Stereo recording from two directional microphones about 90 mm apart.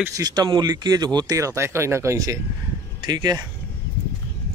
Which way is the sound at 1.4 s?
30° right (ahead or behind).